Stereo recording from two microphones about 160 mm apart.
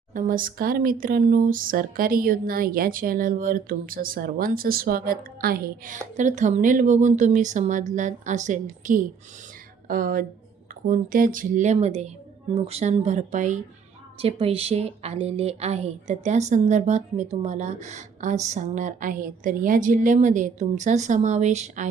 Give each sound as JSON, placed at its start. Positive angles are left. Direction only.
{"t": 0.1, "sound": "a woman's voice", "side_deg": -55}
{"t": 14.2, "sound": "a woman's voice", "side_deg": -40}